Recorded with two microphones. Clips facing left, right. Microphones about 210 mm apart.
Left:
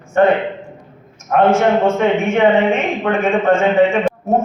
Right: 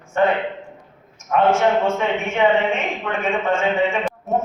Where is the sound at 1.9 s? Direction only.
50° left (ahead or behind).